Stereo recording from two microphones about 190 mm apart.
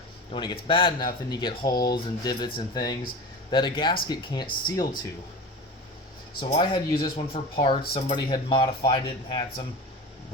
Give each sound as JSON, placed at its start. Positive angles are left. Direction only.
{"t": 0.3, "sound": "speech", "side_deg": 25}
{"t": 6.5, "sound": "speech", "side_deg": 25}